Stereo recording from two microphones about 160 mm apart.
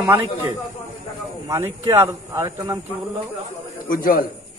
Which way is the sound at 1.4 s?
20° right (ahead or behind).